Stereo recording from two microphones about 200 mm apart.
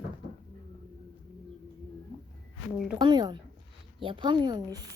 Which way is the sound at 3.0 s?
20° right (ahead or behind).